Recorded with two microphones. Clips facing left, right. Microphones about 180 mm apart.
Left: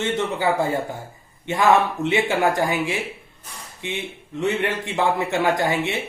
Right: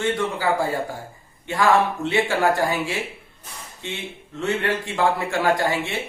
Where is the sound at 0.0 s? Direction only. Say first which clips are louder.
Left 1 dB; 20° left (ahead or behind).